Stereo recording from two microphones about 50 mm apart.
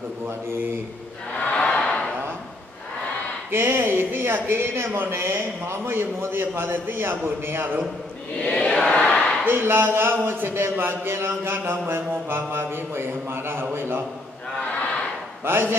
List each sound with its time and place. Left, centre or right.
1.5 s a sound: left
3.5 s a man's voice: right
8.4 s chant: centre
9.5 s a man's voice: right
15.4 s a man's voice: right